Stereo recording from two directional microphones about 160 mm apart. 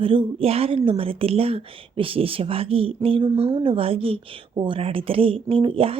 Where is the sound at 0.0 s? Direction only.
35° right (ahead or behind).